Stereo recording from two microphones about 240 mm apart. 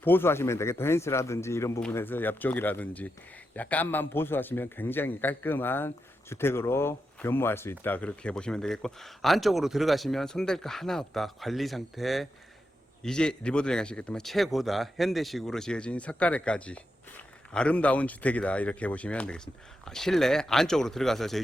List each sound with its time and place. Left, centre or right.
0.0 s a man's voice: centre